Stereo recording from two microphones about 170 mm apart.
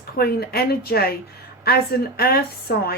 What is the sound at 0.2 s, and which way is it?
Speech, 65° left (ahead or behind).